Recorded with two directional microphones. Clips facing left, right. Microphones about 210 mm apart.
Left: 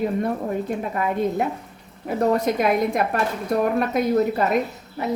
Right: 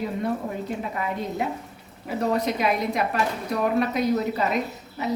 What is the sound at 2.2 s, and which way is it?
A woman's voice, 50° left (ahead or behind).